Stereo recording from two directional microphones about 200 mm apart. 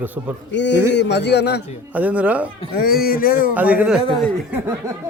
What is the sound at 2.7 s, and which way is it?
Speech, 50° left (ahead or behind).